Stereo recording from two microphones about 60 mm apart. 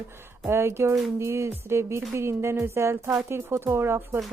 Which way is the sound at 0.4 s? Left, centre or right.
Right.